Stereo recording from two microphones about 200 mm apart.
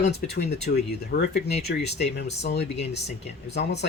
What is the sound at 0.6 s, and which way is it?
Speech, 55° left (ahead or behind).